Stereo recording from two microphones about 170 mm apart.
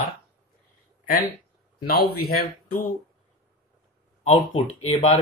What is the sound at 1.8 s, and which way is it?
Speech, 65° left (ahead or behind).